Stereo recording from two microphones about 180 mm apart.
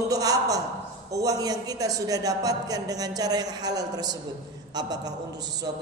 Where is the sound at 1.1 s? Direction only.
20° right (ahead or behind).